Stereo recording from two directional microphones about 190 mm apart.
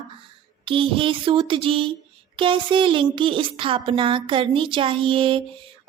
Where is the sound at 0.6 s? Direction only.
25° right (ahead or behind).